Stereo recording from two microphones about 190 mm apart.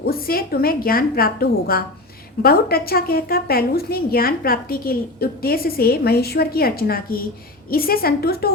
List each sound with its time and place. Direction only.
0.1 s a woman's voice: 50° left (ahead or behind)